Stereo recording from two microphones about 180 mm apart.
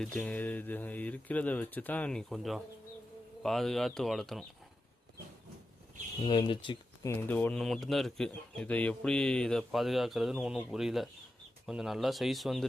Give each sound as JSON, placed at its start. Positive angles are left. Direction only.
{"t": 0.0, "sound": "speech", "side_deg": 5}
{"t": 6.2, "sound": "speech", "side_deg": 25}
{"t": 7.1, "sound": "speech", "side_deg": 10}